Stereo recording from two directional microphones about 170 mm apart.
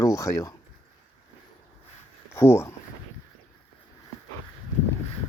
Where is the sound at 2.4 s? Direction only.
15° left (ahead or behind).